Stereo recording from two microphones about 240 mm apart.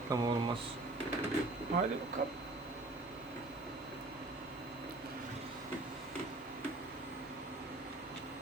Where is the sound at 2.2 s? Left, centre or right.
Right.